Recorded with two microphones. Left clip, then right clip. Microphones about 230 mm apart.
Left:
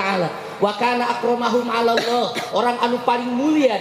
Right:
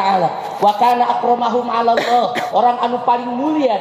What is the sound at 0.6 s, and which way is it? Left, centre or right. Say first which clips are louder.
A woman's voice: right 6 dB; centre.